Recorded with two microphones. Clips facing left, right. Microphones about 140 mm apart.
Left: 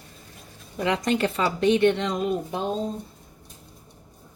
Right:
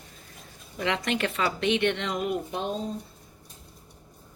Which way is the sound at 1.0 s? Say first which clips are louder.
Left 4 dB; 35° left (ahead or behind).